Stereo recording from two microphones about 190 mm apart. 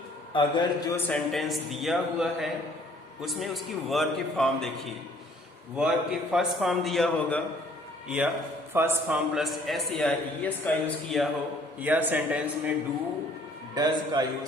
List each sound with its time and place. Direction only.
0.3 s a man's voice: 25° left (ahead or behind)
1.0 s a man's voice: 5° left (ahead or behind)
8.0 s a man's voice: 5° right (ahead or behind)
11.8 s a man's voice: 10° right (ahead or behind)
13.7 s a man's voice: 20° right (ahead or behind)